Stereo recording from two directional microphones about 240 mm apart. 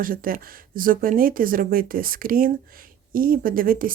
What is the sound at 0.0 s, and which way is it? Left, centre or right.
Speech, right.